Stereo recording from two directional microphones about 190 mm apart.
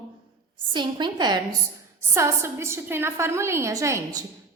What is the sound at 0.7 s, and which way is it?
A woman's voice, 25° right (ahead or behind).